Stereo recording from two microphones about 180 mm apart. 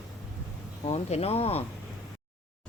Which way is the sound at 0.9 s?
35° left (ahead or behind).